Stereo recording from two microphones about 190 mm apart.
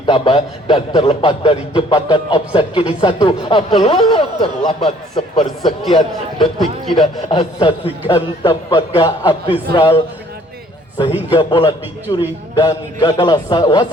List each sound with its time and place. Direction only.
0.0 s a man's voice: 25° left (ahead or behind)
11.3 s a man's voice: 25° left (ahead or behind)